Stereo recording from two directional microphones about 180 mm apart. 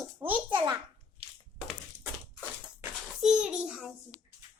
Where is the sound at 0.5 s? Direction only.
15° right (ahead or behind).